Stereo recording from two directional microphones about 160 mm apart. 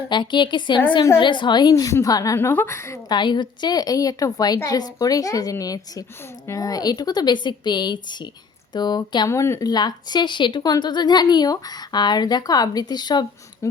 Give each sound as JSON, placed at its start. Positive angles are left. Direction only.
{"t": 0.1, "sound": "a woman's voice", "side_deg": 30}